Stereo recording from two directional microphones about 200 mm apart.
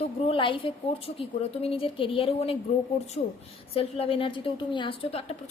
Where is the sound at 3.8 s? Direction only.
30° left (ahead or behind).